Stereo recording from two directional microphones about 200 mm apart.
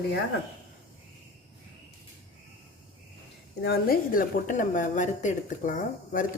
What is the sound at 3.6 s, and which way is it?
A woman's voice, 50° left (ahead or behind).